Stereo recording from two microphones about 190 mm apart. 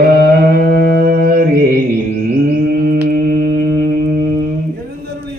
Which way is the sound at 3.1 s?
50° right (ahead or behind).